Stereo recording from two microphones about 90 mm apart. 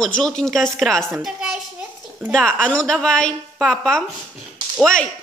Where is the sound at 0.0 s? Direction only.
10° left (ahead or behind).